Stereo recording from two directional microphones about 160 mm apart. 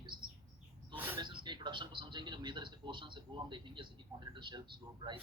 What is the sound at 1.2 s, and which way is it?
Speech, 30° right (ahead or behind).